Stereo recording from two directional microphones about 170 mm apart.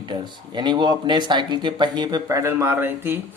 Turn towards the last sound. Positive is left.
turn(degrees=-15)  # may be behind; listen again after turning